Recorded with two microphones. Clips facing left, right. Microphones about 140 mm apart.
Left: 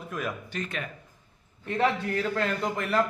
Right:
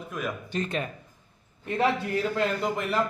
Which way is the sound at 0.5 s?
25° right (ahead or behind).